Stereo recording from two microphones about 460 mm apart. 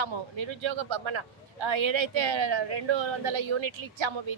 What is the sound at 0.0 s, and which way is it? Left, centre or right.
A woman's voice, right.